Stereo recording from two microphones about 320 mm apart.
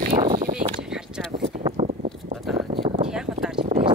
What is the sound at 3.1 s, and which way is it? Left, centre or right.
Clip-clop, centre.